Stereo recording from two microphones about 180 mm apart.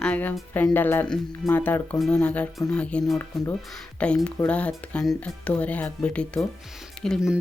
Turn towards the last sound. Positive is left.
turn(degrees=0)  # may be behind; listen again after turning